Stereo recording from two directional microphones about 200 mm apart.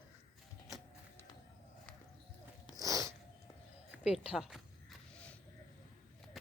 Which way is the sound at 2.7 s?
15° right (ahead or behind).